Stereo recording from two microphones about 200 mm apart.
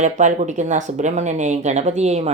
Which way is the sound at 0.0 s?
35° right (ahead or behind).